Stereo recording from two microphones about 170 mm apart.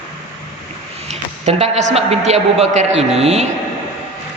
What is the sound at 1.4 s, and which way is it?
Speech, 40° right (ahead or behind).